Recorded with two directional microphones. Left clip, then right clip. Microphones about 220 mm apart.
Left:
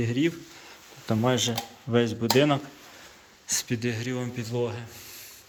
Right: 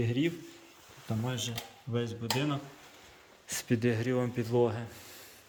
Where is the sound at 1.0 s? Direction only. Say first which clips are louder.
Left 12 dB; 10° left (ahead or behind).